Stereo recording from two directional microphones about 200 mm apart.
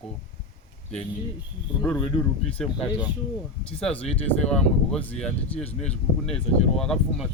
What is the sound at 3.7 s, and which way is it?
Speech, 5° left (ahead or behind).